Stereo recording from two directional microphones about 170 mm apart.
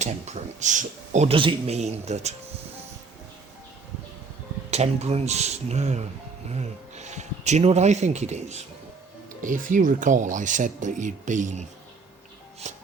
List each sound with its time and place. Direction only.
0.0 s speech: 40° right (ahead or behind)
4.7 s speech: 40° right (ahead or behind)
12.7 s music: 45° right (ahead or behind)